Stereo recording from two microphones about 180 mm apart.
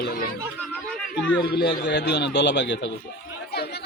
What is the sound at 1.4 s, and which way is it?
A man's voice, 65° left (ahead or behind).